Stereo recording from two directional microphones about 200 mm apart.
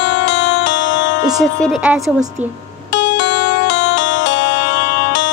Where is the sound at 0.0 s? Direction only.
60° left (ahead or behind).